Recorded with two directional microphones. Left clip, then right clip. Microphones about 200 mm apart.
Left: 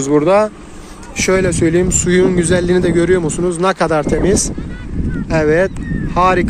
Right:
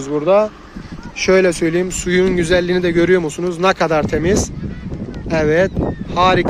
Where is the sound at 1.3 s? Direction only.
Centre (ahead or behind).